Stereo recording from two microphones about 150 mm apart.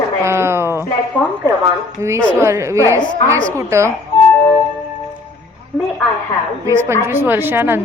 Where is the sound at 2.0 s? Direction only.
20° right (ahead or behind).